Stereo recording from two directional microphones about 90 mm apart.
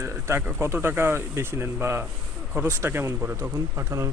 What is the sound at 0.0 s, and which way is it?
Speech, 25° right (ahead or behind).